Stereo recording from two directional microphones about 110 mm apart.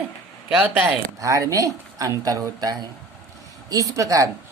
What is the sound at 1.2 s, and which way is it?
Speech, 30° right (ahead or behind).